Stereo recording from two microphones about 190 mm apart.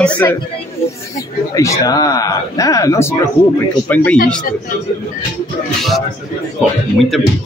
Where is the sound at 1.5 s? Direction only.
15° left (ahead or behind).